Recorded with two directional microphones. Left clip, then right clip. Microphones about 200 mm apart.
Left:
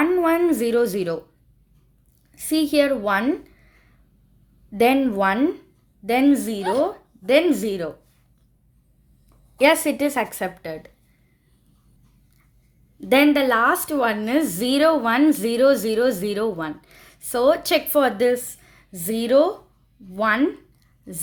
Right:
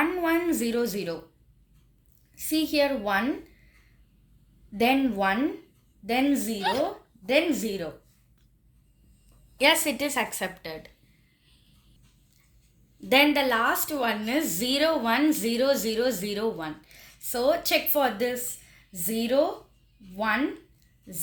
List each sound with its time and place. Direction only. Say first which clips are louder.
0.0 s a sound: left 7 dB; 50° left (ahead or behind)
2.3 s a woman's voice: left 6 dB; 50° left (ahead or behind)
4.8 s a woman's voice: left 6 dB; 50° left (ahead or behind)
6.6 s speech: left 5 dB; centre (ahead or behind)
7.3 s a woman's voice: left 7 dB; 55° left (ahead or behind)
9.6 s a woman's voice: left 5 dB; 45° left (ahead or behind)
13.1 s a woman's voice: left 4 dB; 45° left (ahead or behind)